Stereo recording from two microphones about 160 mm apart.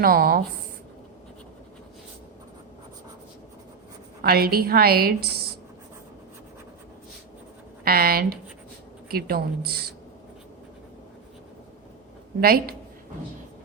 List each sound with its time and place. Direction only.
0.0 s a woman's voice: 70° right (ahead or behind)
4.2 s a woman's voice: 70° right (ahead or behind)
7.9 s a woman's voice: 70° right (ahead or behind)
12.4 s a woman's voice: 70° right (ahead or behind)